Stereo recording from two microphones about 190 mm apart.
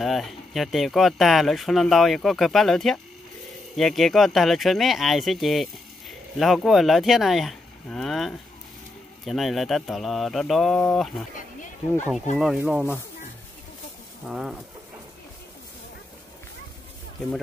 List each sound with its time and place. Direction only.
0.0 s speech: centre (ahead or behind)
12.4 s speech: 5° right (ahead or behind)
14.2 s speech: centre (ahead or behind)